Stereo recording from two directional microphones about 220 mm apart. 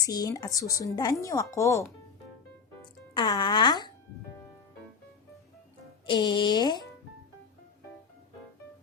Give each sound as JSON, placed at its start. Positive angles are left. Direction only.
{"t": 0.0, "sound": "speech", "side_deg": 15}
{"t": 3.2, "sound": "speech", "side_deg": 20}
{"t": 6.1, "sound": "speech", "side_deg": 20}